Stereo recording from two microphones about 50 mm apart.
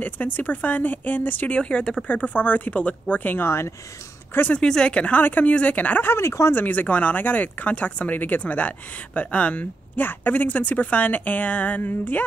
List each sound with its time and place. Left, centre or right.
0.0 s speech: left
1.6 s speech: centre
3.3 s speech: left
4.6 s speech: centre
6.0 s speech: left
6.5 s speech: left